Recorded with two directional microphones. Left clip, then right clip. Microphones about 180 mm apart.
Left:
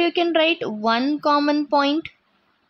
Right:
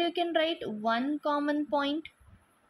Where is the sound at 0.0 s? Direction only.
30° left (ahead or behind).